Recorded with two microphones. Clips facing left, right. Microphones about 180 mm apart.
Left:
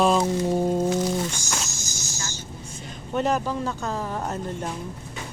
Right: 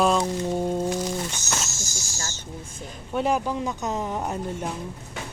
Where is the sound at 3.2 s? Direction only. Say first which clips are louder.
Even; 10° right (ahead or behind).